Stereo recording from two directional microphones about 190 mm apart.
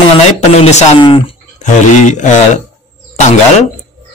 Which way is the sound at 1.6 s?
40° left (ahead or behind).